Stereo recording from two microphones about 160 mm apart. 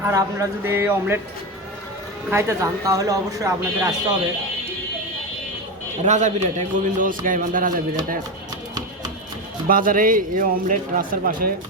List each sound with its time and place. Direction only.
0.0 s speech: 20° right (ahead or behind)
2.3 s speech: 20° right (ahead or behind)
6.0 s a man's voice: 45° right (ahead or behind)
9.6 s speech: 60° right (ahead or behind)